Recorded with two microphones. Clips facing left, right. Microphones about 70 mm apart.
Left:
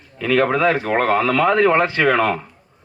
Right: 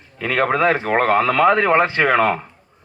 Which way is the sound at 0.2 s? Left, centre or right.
Right.